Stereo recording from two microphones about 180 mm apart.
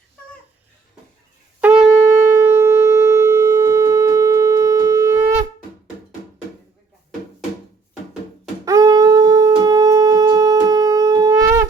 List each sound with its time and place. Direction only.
1.6 s shofar: 10° right (ahead or behind)
8.6 s shofar: 20° right (ahead or behind)